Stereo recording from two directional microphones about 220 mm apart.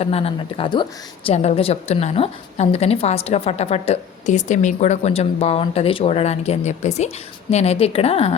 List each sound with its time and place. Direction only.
0.0 s a woman's voice: 25° left (ahead or behind)